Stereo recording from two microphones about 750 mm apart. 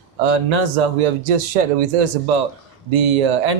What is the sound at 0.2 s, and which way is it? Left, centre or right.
A man's voice, right.